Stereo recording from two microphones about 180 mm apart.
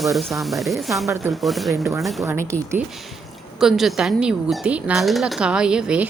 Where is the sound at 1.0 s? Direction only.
15° right (ahead or behind).